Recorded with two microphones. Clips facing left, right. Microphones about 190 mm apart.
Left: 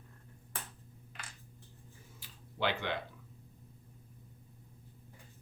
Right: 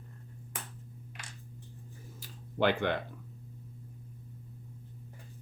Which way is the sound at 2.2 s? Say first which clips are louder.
Right 6 dB; 50° right (ahead or behind).